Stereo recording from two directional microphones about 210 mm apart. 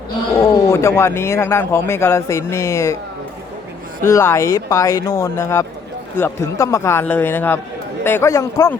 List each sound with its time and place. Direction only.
0.3 s speech: 15° left (ahead or behind)
4.0 s speech: 15° left (ahead or behind)